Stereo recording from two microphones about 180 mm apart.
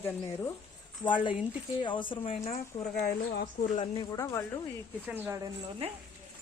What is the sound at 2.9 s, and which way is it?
Speech, 55° left (ahead or behind).